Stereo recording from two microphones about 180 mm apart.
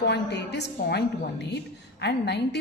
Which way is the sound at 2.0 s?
70° left (ahead or behind).